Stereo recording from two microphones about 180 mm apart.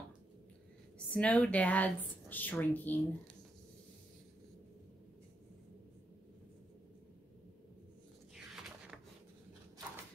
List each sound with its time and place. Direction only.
0.9 s speech: 5° left (ahead or behind)